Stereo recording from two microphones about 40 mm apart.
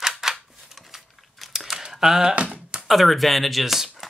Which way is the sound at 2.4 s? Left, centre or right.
Right.